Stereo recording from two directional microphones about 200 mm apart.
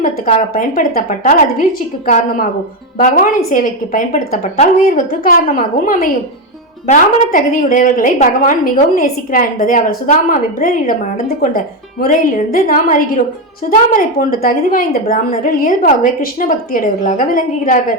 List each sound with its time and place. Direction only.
0.0 s a woman's voice: 40° left (ahead or behind)